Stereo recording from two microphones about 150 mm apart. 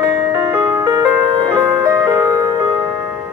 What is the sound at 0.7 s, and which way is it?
Music, 25° right (ahead or behind).